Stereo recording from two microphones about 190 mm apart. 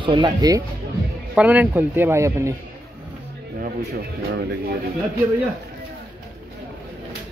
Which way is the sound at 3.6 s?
50° right (ahead or behind).